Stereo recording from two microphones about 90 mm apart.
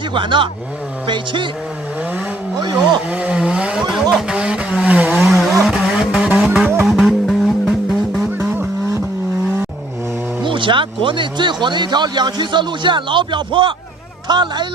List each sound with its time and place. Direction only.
0.1 s speech: 65° right (ahead or behind)
2.6 s speech: 55° right (ahead or behind)
3.1 s vehicle: 15° right (ahead or behind)
5.2 s vehicle: centre (ahead or behind)
8.4 s vehicle: 30° right (ahead or behind)
10.4 s speech: 65° right (ahead or behind)